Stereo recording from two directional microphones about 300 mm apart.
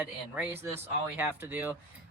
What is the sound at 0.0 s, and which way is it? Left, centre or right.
Speech, centre.